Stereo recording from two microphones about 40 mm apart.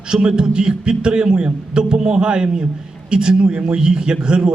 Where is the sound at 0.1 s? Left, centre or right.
Right.